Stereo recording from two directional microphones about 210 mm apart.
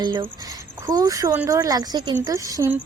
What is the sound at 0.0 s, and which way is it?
Speech, 20° right (ahead or behind).